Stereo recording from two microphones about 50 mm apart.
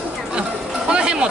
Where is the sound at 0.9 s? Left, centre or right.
Centre.